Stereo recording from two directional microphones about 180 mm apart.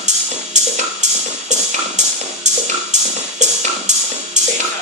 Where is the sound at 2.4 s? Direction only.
40° right (ahead or behind).